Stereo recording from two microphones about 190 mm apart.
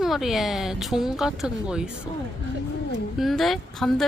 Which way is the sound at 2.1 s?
25° left (ahead or behind).